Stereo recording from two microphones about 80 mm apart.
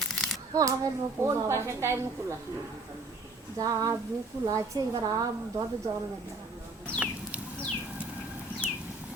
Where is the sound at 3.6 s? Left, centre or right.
Right.